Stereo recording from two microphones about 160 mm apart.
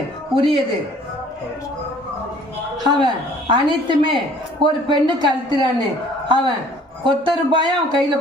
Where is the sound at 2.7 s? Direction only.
25° right (ahead or behind).